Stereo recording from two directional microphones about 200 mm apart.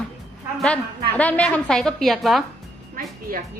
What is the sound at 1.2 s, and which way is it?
A woman's voice, 5° left (ahead or behind).